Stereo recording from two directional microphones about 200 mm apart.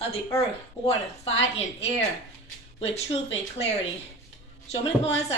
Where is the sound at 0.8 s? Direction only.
30° left (ahead or behind).